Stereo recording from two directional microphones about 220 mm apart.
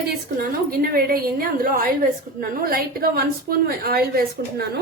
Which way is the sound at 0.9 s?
40° right (ahead or behind).